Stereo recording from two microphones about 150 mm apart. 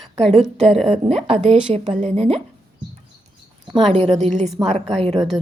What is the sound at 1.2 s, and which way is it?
A woman's voice, 45° right (ahead or behind).